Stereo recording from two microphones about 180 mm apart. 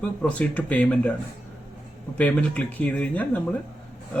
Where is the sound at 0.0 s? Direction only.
5° left (ahead or behind).